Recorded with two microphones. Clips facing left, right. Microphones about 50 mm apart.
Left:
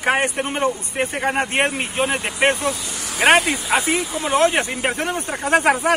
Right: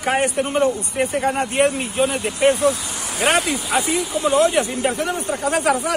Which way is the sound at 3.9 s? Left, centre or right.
Left.